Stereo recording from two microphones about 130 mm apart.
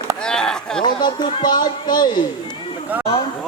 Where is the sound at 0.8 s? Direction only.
35° left (ahead or behind).